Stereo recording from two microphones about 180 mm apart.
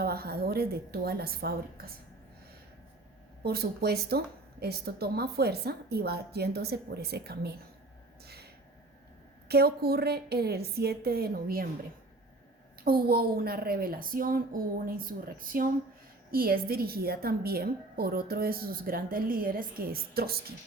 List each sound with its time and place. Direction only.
0.0 s a woman's voice: 60° right (ahead or behind)
3.4 s a woman's voice: 60° right (ahead or behind)
8.2 s a sound: 60° right (ahead or behind)
9.5 s a woman's voice: 60° right (ahead or behind)
12.8 s a woman's voice: 55° right (ahead or behind)